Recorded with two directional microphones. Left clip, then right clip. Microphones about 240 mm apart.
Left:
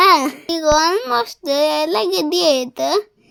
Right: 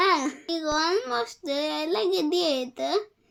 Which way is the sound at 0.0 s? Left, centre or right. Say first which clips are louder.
Left 11 dB; left.